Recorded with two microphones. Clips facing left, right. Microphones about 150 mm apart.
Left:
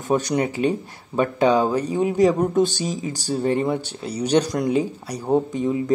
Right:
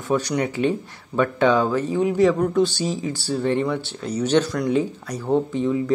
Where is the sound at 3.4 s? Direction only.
40° left (ahead or behind).